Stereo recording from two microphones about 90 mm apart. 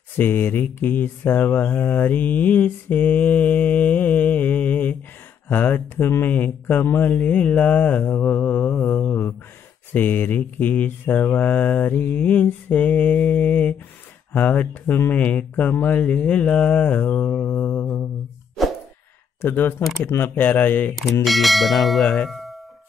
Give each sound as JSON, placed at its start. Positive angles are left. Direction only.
{"t": 0.2, "sound": "mantra", "side_deg": 25}
{"t": 18.6, "sound": "plop", "side_deg": 0}
{"t": 19.4, "sound": "mantra", "side_deg": 25}
{"t": 20.9, "sound": "bell", "side_deg": 0}
{"t": 22.3, "sound": "music", "side_deg": 0}